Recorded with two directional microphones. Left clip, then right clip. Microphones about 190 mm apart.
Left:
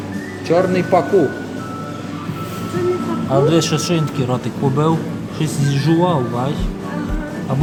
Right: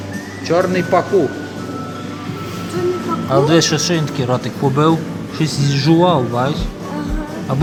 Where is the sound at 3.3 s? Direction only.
10° right (ahead or behind).